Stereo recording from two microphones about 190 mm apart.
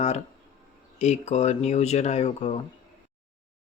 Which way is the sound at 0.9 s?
35° left (ahead or behind).